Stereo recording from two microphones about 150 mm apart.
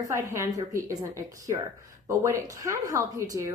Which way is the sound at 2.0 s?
20° right (ahead or behind).